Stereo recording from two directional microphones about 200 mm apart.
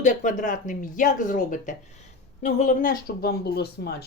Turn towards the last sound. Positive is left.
turn(degrees=50)  # may be behind; listen again after turning